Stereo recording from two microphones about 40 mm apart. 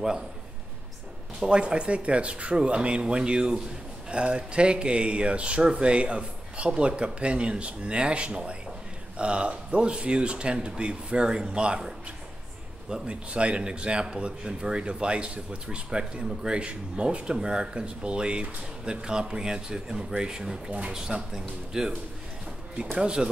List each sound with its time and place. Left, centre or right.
1.4 s a man's voice: right
12.9 s a man's voice: right
22.9 s a man's voice: centre